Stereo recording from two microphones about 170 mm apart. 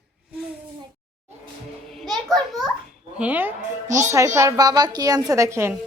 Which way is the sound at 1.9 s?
Centre (ahead or behind).